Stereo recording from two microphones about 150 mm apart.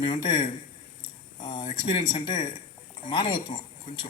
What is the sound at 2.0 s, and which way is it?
Speech, 55° left (ahead or behind).